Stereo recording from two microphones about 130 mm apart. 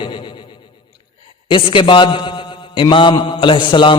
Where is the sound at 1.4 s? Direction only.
40° left (ahead or behind).